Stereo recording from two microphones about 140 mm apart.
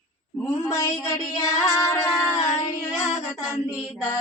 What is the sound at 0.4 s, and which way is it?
Mantra, 25° left (ahead or behind).